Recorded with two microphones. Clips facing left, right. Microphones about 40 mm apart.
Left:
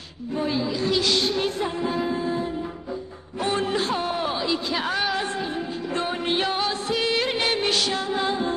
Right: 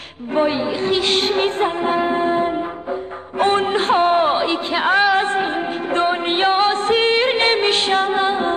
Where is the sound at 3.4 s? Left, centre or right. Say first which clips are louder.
Right 7 dB; right.